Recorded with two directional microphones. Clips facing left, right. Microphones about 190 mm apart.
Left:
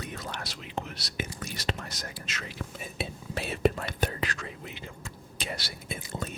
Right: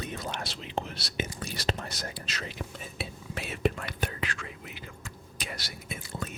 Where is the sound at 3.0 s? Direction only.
20° left (ahead or behind).